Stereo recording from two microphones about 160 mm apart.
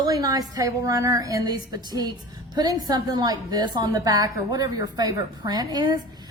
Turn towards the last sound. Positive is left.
turn(degrees=-25)  # may be behind; listen again after turning